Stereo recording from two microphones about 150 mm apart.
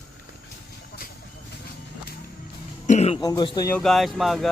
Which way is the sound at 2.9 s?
45° left (ahead or behind).